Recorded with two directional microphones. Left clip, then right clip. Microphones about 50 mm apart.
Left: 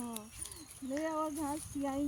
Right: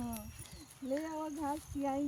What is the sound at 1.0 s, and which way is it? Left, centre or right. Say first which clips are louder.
Speech: left 5 dB; centre.